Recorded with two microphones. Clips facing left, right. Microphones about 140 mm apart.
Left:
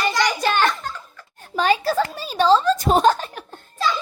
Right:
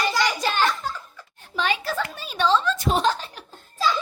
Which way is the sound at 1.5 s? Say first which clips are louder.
Left 6 dB; 40° left (ahead or behind).